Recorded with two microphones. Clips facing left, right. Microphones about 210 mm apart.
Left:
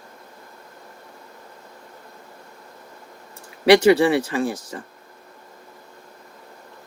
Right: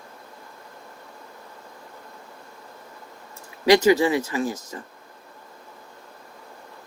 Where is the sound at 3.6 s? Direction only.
75° left (ahead or behind).